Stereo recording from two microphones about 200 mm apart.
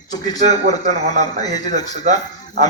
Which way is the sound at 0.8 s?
35° right (ahead or behind).